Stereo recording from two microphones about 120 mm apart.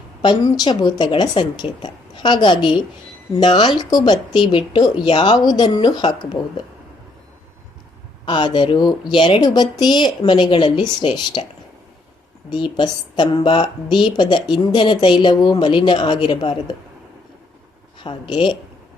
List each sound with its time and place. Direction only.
0.2 s a woman's voice: 35° left (ahead or behind)
8.2 s a woman's voice: 40° left (ahead or behind)
12.5 s a woman's voice: 40° left (ahead or behind)
18.0 s speech: 45° left (ahead or behind)